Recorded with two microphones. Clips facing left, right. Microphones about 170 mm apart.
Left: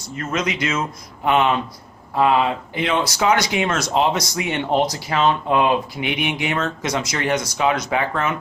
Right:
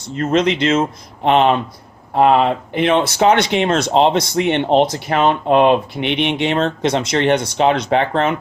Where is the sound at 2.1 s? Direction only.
55° right (ahead or behind).